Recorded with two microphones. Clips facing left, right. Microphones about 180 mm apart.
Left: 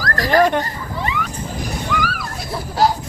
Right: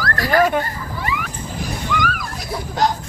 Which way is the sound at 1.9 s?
5° left (ahead or behind).